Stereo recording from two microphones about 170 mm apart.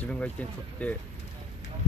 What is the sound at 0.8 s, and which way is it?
Speech, 10° left (ahead or behind).